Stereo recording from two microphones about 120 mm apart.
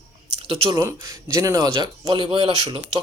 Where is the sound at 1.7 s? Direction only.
40° right (ahead or behind).